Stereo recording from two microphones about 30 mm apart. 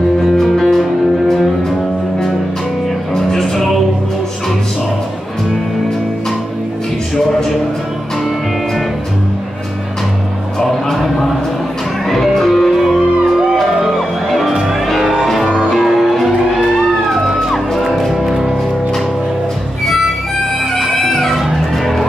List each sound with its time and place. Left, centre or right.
0.5 s music: centre
3.2 s music: centre
7.2 s music: centre
12.4 s music: centre
20.8 s music: centre